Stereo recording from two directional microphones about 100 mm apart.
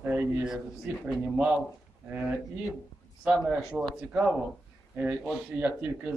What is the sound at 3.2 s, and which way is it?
A man's voice, 10° right (ahead or behind).